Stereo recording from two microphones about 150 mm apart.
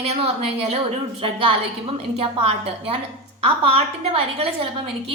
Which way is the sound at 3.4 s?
40° right (ahead or behind).